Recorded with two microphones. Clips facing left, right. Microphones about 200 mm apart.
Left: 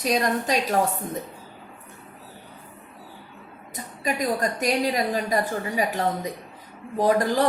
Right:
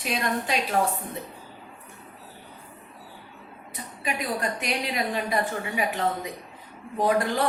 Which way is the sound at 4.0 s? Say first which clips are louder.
Left 4 dB; 40° left (ahead or behind).